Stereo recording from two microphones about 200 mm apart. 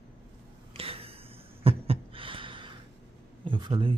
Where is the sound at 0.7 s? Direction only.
30° right (ahead or behind).